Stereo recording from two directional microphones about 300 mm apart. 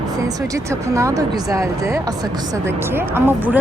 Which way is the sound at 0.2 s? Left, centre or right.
Centre.